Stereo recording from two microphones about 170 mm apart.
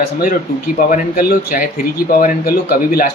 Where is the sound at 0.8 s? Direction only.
55° left (ahead or behind).